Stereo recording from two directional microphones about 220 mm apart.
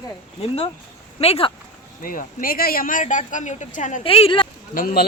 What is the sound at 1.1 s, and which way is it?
Speech, 25° left (ahead or behind).